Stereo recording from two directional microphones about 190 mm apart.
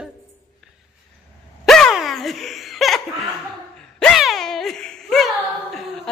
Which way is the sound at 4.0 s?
Centre (ahead or behind).